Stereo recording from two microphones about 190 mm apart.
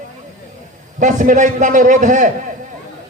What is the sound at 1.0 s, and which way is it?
A man's voice, 40° right (ahead or behind).